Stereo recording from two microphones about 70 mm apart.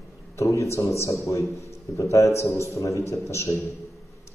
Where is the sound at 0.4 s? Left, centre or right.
Left.